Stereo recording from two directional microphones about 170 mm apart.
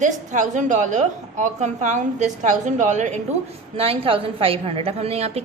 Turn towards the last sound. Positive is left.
turn(degrees=-35)  # may be behind; listen again after turning